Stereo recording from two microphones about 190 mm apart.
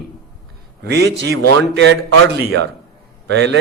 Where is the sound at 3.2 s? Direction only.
65° right (ahead or behind).